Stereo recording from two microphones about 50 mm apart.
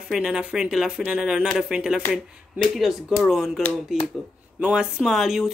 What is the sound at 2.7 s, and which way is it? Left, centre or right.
Speech, centre.